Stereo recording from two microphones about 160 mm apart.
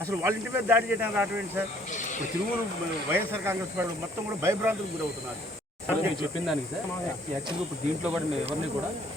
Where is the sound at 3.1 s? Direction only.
15° right (ahead or behind).